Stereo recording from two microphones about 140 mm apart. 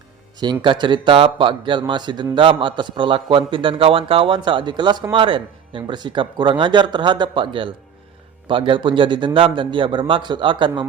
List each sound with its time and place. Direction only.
0.6 s speech: 35° right (ahead or behind)